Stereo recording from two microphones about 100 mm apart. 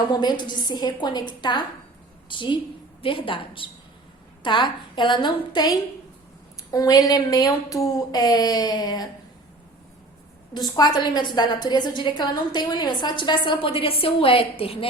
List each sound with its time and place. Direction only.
0.1 s a woman's voice: 45° left (ahead or behind)
10.5 s a woman's voice: 45° left (ahead or behind); by 14.8 s 75° left (ahead or behind)